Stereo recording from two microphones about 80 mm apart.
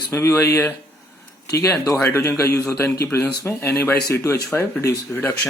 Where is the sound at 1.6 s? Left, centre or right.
Left.